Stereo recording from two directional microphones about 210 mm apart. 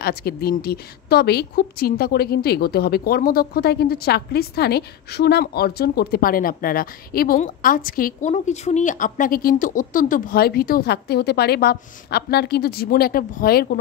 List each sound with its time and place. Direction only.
0.0 s speech: 50° left (ahead or behind)